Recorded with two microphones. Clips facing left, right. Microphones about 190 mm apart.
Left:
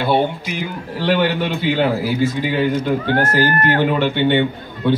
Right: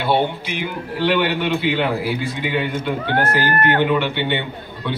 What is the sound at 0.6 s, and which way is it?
A man's voice, 40° left (ahead or behind).